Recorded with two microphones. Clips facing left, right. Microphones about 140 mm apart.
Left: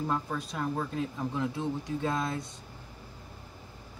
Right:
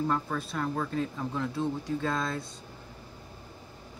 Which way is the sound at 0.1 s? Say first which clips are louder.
Right 2 dB; 15° left (ahead or behind).